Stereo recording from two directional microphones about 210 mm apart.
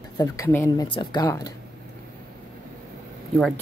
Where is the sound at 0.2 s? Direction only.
10° left (ahead or behind).